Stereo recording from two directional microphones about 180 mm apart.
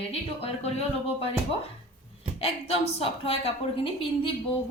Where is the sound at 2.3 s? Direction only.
35° left (ahead or behind).